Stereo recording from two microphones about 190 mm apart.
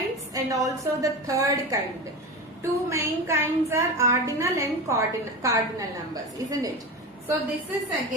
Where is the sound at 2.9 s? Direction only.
15° right (ahead or behind).